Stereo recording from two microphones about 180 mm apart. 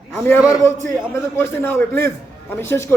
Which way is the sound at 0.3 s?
15° left (ahead or behind).